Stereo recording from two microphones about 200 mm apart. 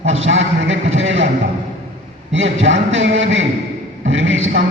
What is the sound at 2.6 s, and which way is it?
A man's voice, 70° right (ahead or behind).